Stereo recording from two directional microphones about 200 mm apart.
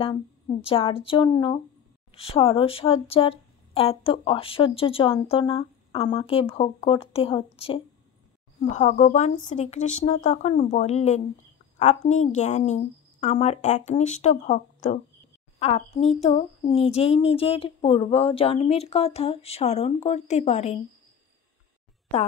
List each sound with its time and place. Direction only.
0.0 s speech: 30° left (ahead or behind)